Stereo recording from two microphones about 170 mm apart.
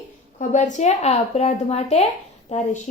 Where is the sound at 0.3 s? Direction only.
45° left (ahead or behind).